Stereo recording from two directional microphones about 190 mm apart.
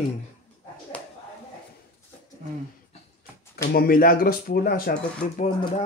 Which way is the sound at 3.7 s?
50° left (ahead or behind).